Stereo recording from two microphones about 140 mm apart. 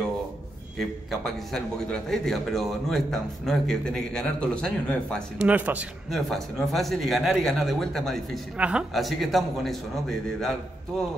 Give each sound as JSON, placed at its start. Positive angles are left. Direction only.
{"t": 0.7, "sound": "a man's voice", "side_deg": 0}
{"t": 5.4, "sound": "a man's voice", "side_deg": -10}
{"t": 6.0, "sound": "a man's voice", "side_deg": 0}